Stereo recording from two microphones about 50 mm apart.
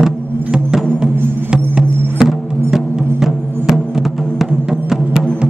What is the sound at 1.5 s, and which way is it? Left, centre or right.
Music, centre.